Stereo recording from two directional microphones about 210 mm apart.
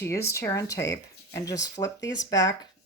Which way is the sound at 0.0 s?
15° left (ahead or behind).